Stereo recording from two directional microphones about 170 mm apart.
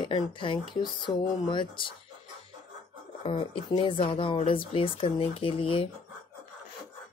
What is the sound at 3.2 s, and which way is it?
Speech, 30° left (ahead or behind).